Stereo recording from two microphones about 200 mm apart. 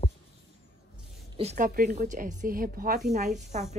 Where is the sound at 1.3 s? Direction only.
35° right (ahead or behind).